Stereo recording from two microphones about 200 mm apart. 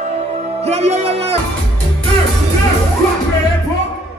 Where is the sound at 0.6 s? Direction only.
30° right (ahead or behind).